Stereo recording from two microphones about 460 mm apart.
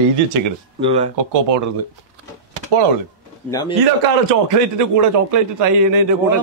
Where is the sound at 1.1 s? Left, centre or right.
Right.